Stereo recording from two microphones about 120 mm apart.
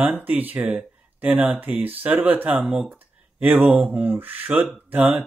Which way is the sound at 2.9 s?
15° right (ahead or behind).